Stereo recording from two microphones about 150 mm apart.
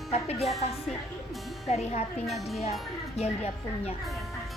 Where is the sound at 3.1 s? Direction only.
45° left (ahead or behind).